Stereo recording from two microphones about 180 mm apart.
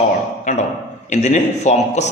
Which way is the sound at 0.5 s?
40° left (ahead or behind).